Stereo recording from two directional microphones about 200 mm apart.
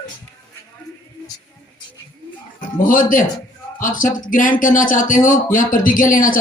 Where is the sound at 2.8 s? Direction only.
40° left (ahead or behind).